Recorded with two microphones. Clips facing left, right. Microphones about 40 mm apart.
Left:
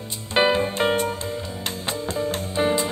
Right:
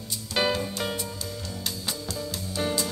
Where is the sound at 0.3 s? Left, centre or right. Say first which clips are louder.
Left 7 dB; left.